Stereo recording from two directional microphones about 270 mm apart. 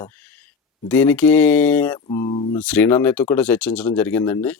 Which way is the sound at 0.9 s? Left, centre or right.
Centre.